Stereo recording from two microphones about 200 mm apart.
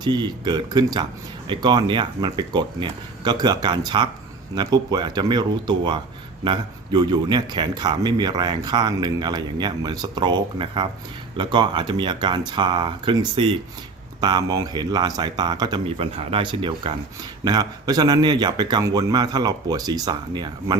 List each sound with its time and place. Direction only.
0.0 s a man's voice: 20° right (ahead or behind)